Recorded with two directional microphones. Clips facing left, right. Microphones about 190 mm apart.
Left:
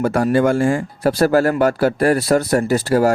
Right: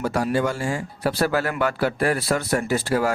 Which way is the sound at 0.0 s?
55° left (ahead or behind).